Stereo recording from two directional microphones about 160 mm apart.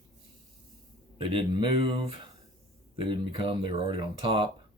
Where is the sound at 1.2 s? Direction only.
35° right (ahead or behind).